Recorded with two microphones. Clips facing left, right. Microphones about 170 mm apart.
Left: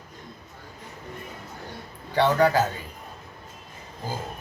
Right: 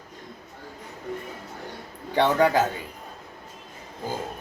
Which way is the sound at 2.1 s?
20° right (ahead or behind).